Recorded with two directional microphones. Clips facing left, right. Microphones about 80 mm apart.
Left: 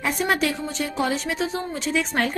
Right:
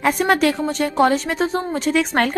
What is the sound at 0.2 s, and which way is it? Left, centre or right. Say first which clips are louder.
A woman's voice: right 6 dB; right.